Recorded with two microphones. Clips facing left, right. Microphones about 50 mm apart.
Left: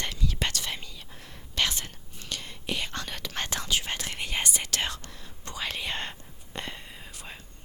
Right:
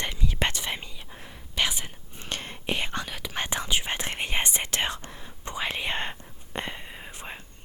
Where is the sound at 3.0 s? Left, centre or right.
Centre.